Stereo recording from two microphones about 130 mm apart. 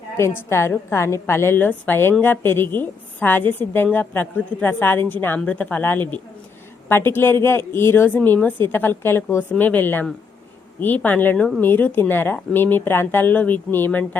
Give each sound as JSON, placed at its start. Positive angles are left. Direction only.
{"t": 0.2, "sound": "a woman's voice", "side_deg": 20}